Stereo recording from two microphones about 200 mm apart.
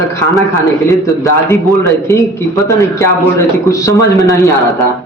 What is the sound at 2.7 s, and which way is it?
Speech, 15° left (ahead or behind).